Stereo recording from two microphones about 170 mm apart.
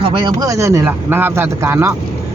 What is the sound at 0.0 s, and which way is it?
A man's voice, 30° right (ahead or behind).